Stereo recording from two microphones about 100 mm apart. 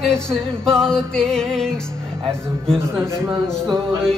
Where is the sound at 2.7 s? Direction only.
25° right (ahead or behind).